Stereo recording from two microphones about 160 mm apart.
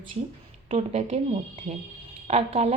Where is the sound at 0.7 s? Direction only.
45° right (ahead or behind).